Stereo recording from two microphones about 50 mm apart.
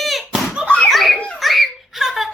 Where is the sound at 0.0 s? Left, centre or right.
Centre.